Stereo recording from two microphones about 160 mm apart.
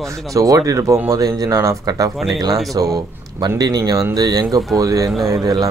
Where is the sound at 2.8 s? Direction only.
25° right (ahead or behind).